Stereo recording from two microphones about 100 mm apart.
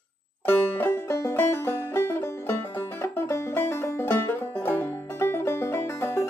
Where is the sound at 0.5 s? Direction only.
25° left (ahead or behind).